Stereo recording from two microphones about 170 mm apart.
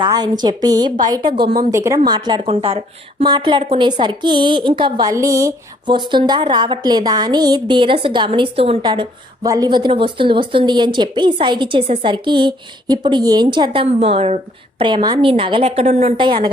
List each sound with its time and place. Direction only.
0.0 s a woman's voice: 25° right (ahead or behind)
15.9 s a woman's voice: 45° right (ahead or behind)
16.1 s a woman's voice: 25° right (ahead or behind)